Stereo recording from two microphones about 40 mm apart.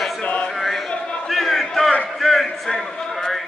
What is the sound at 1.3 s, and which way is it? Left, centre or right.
Crowd, centre.